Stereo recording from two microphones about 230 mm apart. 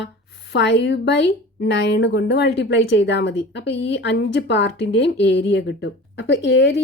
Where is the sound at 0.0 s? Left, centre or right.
Left.